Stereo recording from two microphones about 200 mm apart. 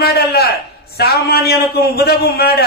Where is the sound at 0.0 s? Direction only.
50° left (ahead or behind).